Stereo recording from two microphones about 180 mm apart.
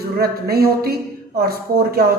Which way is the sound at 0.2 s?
60° right (ahead or behind).